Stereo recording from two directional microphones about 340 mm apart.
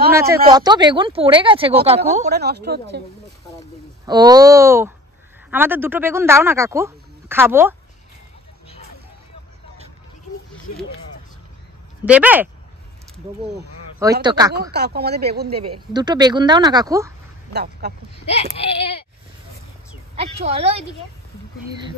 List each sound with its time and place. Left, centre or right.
0.1 s a woman's voice: centre; by 3.0 s right
4.0 s speech: centre
10.7 s speech: left
12.0 s speech: centre
14.2 s speech: centre
14.5 s a woman's voice: right
15.9 s speech: centre
17.5 s speech: right
18.2 s speech: centre
20.2 s speech: centre